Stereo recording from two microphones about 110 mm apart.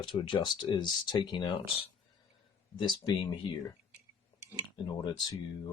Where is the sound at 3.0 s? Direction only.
40° left (ahead or behind).